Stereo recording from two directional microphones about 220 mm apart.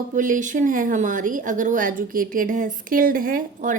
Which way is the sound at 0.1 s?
35° right (ahead or behind).